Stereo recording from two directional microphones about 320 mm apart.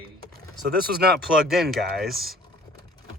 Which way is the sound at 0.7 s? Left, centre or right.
Right.